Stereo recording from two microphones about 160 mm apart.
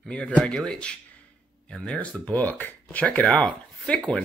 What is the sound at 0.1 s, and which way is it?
Speech, 5° left (ahead or behind).